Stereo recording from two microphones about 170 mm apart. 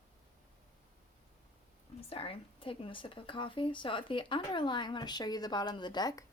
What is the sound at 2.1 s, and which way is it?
A woman's voice, 35° left (ahead or behind).